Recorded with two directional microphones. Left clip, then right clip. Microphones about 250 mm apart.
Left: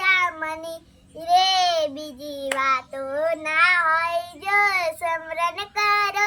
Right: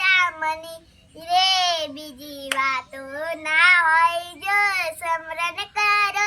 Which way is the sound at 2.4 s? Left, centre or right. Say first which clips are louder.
Left 1 dB; centre.